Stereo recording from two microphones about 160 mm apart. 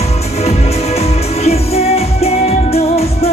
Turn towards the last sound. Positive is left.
turn(degrees=40)  # may be behind; listen again after turning